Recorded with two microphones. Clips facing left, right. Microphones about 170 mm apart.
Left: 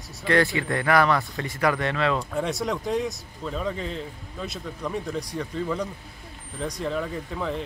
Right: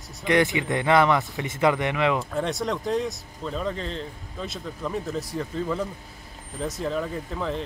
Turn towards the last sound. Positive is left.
turn(degrees=0)  # may be behind; listen again after turning